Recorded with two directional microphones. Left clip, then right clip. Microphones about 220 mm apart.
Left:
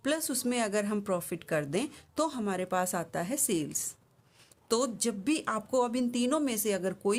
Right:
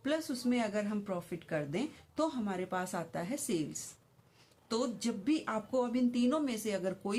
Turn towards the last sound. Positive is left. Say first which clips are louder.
# left 6 dB
turn(degrees=40)  # may be behind; listen again after turning